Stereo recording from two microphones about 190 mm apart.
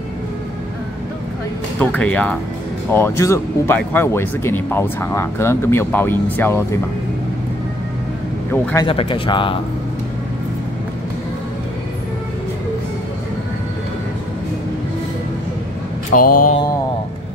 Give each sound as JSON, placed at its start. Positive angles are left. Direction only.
{"t": 1.8, "sound": "speech", "side_deg": 5}
{"t": 8.8, "sound": "speech", "side_deg": 30}
{"t": 16.1, "sound": "mantra", "side_deg": 45}